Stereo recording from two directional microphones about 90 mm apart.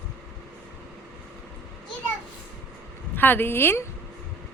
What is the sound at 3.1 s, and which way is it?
Speech, 20° left (ahead or behind).